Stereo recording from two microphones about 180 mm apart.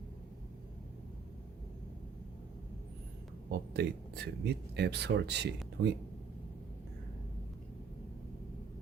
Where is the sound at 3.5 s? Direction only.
65° right (ahead or behind).